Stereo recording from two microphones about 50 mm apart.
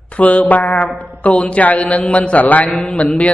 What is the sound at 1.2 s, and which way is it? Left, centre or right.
Mantra, left.